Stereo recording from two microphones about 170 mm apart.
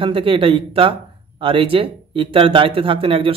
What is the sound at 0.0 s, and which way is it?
Speech, 30° right (ahead or behind).